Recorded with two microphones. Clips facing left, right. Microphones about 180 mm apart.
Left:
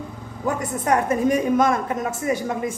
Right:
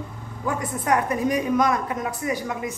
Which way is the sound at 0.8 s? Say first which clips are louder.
Left 3 dB; 45° left (ahead or behind).